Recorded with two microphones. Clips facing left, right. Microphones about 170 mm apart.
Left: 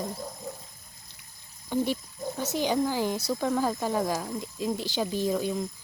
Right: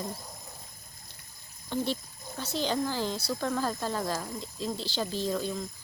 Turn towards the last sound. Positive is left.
turn(degrees=15)  # may be behind; listen again after turning